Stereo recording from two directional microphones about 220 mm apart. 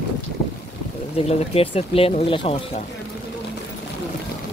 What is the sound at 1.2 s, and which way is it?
Speech, 30° left (ahead or behind).